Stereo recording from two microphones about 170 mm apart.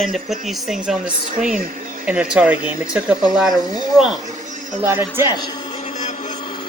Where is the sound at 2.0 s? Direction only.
5° right (ahead or behind).